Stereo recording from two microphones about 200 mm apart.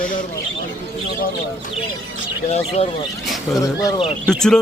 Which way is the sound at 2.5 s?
30° left (ahead or behind).